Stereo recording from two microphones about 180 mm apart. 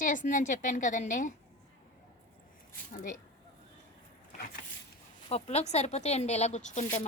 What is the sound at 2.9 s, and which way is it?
Speech, 45° left (ahead or behind).